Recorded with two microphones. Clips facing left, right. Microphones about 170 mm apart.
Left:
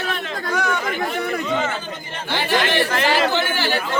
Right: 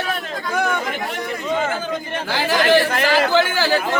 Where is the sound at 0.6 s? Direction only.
50° right (ahead or behind).